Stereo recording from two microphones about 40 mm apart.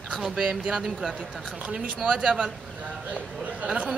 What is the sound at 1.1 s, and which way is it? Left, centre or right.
Speech, centre.